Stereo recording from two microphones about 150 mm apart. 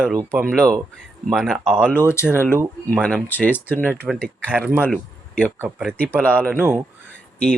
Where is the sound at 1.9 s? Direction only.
15° left (ahead or behind).